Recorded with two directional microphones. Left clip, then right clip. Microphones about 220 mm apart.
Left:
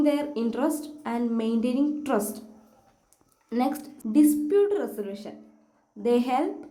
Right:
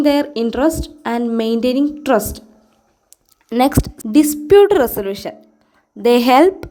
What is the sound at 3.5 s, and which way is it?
A woman's voice, 40° right (ahead or behind).